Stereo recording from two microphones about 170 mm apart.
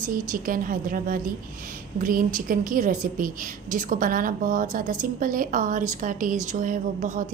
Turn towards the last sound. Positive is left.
turn(degrees=-45)  # may be behind; listen again after turning